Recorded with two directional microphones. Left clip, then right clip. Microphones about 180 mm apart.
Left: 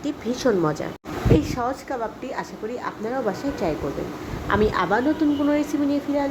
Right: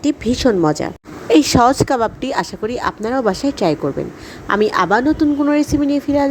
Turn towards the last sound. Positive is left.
turn(degrees=-40)  # may be behind; listen again after turning